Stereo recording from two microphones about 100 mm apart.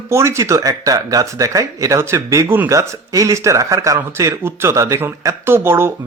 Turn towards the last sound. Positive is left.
turn(degrees=-25)  # may be behind; listen again after turning